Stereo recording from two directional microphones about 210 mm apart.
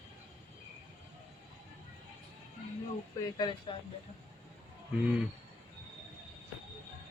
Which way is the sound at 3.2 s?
20° left (ahead or behind).